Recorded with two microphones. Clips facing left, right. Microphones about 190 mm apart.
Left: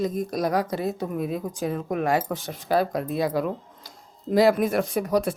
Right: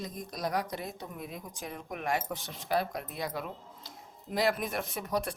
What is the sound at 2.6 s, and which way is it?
Speech, 90° left.